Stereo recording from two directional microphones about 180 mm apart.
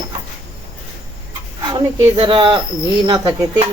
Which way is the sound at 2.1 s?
25° right (ahead or behind).